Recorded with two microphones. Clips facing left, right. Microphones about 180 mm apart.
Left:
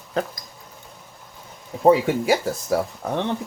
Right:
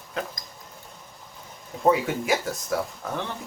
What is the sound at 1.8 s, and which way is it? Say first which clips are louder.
Speech: left 5 dB; 35° left (ahead or behind).